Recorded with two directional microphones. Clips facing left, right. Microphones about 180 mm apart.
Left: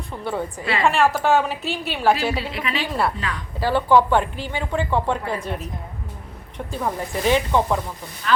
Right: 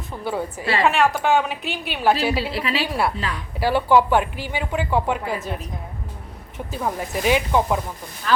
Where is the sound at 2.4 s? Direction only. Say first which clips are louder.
Right 2 dB; 30° right (ahead or behind).